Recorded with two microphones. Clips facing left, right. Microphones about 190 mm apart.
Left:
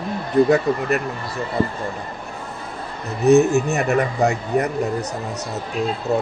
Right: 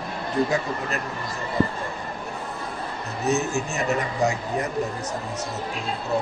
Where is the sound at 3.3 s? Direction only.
60° left (ahead or behind).